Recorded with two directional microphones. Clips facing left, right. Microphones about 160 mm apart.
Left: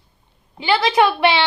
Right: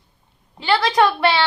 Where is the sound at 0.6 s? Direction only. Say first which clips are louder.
Left 1 dB; 20° left (ahead or behind).